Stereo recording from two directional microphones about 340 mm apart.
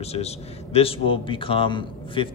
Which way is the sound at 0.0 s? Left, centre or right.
Centre.